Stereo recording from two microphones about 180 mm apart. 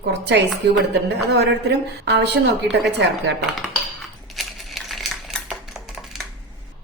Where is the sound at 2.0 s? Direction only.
65° right (ahead or behind).